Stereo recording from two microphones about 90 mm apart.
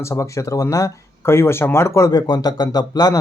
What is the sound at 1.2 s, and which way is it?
Speech, 30° left (ahead or behind).